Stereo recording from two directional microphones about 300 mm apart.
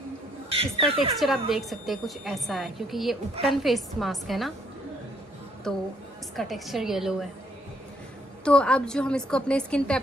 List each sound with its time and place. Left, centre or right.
0.6 s speech: centre
1.5 s a woman's voice: centre
5.7 s a woman's voice: centre
8.5 s a woman's voice: centre